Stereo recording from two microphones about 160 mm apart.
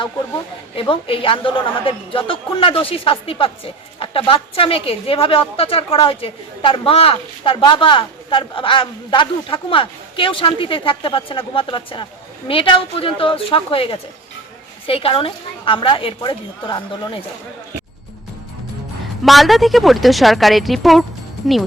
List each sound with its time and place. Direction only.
0.8 s a woman's voice: 35° left (ahead or behind)
19.2 s speech: centre (ahead or behind)